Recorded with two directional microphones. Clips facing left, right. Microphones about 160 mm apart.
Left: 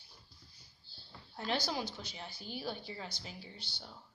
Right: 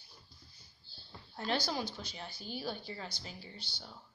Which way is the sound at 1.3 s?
15° left (ahead or behind).